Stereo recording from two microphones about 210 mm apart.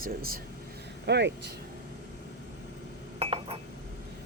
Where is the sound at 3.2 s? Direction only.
25° right (ahead or behind).